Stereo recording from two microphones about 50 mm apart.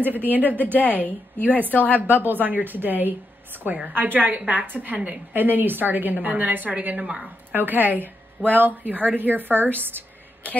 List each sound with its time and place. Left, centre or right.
0.0 s a woman's voice: right
1.7 s a woman's voice: left
2.0 s a woman's voice: right
7.0 s speech: right
7.5 s a woman's voice: right